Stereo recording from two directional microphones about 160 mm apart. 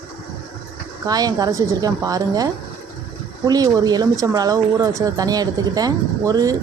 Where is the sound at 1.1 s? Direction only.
25° right (ahead or behind).